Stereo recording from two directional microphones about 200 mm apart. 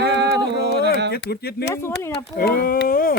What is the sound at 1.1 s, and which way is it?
Speech, 50° left (ahead or behind).